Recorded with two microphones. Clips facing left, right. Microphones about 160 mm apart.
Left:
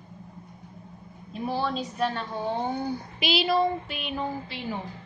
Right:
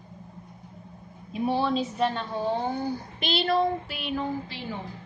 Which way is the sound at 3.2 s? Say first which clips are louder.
Left 1 dB; 5° left (ahead or behind).